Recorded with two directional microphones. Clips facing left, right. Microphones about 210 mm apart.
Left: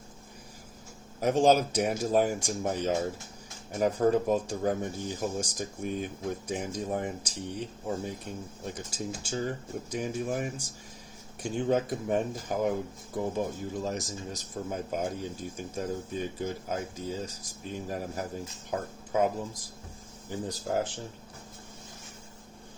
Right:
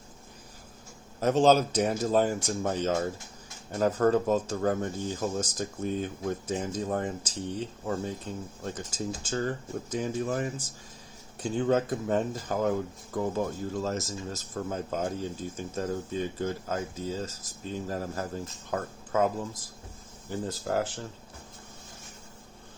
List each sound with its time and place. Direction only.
1.2 s speech: 10° left (ahead or behind)